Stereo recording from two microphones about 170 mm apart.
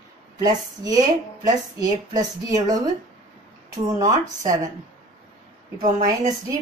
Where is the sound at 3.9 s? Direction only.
20° right (ahead or behind).